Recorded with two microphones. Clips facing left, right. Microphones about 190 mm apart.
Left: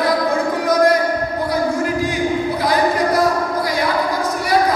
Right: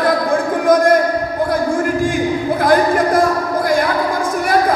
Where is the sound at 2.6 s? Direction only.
50° right (ahead or behind).